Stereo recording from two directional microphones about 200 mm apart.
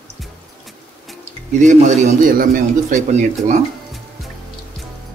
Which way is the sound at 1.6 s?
35° right (ahead or behind).